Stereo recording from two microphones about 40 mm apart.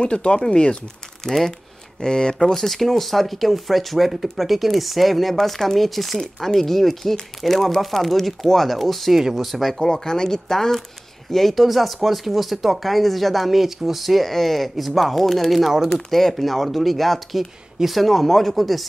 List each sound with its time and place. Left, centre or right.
0.0 s speech: left
1.2 s speech: centre
2.0 s speech: centre
2.3 s speech: centre
9.6 s speech: centre
11.3 s speech: centre
16.1 s speech: centre